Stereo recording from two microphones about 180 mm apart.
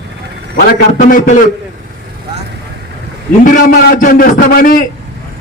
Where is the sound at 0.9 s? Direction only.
50° left (ahead or behind).